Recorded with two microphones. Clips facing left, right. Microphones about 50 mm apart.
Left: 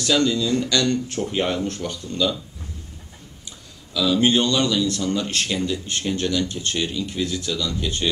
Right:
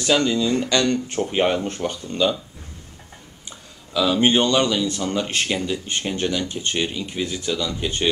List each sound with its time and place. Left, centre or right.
0.0 s speech: right
3.9 s speech: right